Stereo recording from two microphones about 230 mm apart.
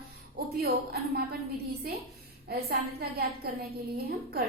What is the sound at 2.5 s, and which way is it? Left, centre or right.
A woman's voice, right.